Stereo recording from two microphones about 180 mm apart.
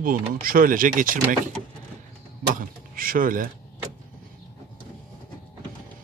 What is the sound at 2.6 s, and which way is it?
Speech, 50° right (ahead or behind).